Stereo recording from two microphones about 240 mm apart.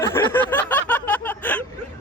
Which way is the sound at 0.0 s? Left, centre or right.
Centre.